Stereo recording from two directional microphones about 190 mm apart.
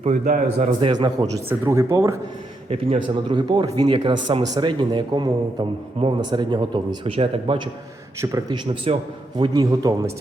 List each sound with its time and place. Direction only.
0.0 s a man's voice: 35° right (ahead or behind)
1.5 s speech: 15° right (ahead or behind)
2.6 s speech: 25° right (ahead or behind)
8.2 s speech: 15° right (ahead or behind)